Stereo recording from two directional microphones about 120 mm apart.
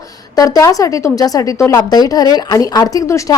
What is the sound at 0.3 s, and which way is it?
Speech, 30° left (ahead or behind).